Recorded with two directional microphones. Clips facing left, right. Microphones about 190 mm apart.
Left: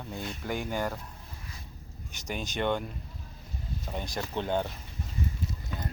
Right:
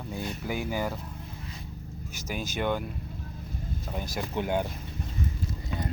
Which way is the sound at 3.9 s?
5° right (ahead or behind).